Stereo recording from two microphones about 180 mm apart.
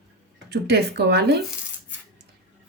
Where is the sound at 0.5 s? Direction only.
70° right (ahead or behind).